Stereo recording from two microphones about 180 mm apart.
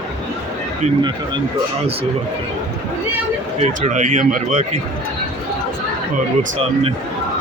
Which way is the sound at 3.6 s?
40° right (ahead or behind).